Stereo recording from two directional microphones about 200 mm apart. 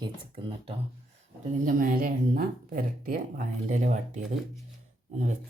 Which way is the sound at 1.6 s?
45° right (ahead or behind).